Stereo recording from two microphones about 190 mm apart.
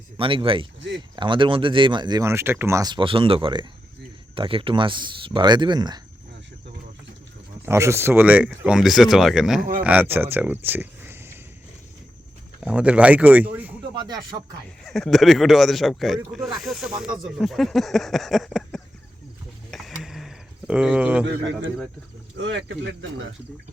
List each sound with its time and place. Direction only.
0.2 s speech: 30° right (ahead or behind)
7.6 s speech: 15° right (ahead or behind)
12.5 s speech: 5° right (ahead or behind)
14.8 s speech: centre (ahead or behind)
19.7 s a sound: centre (ahead or behind)
21.2 s speech: 70° right (ahead or behind)